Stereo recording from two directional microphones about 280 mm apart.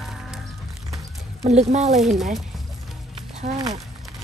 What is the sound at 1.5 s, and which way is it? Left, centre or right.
Speech, right.